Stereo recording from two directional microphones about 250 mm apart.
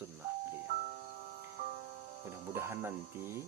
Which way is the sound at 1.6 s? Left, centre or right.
Right.